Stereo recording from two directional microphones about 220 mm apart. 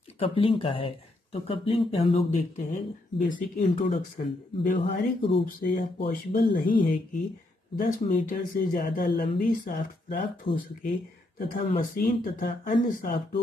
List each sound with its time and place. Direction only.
0.2 s speech: 25° left (ahead or behind)
4.6 s speech: 25° left (ahead or behind)
5.4 s speech: 40° left (ahead or behind)
10.4 s speech: 25° left (ahead or behind)
11.3 s speech: 40° left (ahead or behind)